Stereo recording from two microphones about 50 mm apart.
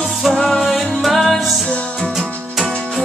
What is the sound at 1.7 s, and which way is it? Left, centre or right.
Music, left.